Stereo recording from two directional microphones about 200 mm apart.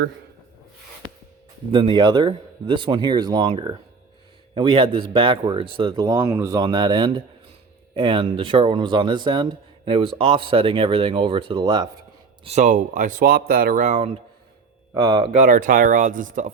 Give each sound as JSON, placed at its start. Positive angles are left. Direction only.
{"t": 1.7, "sound": "speech", "side_deg": -25}
{"t": 12.5, "sound": "speech", "side_deg": -35}
{"t": 14.9, "sound": "speech", "side_deg": -20}
{"t": 15.3, "sound": "speech", "side_deg": -40}